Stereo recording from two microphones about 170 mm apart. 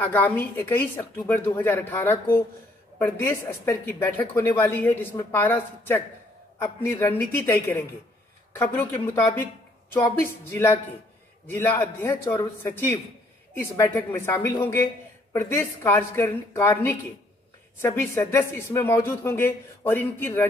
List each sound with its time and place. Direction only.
0.0 s speech: 10° left (ahead or behind)